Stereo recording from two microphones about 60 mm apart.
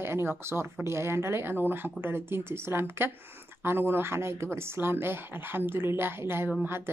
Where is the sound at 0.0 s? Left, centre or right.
Right.